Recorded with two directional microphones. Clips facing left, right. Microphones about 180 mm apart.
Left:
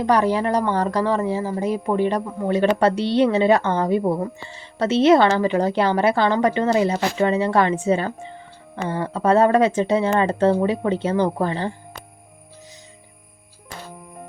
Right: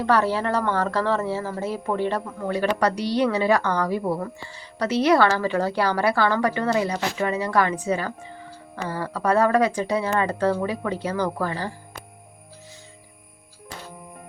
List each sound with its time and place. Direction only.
0.0 s a woman's voice: 15° left (ahead or behind)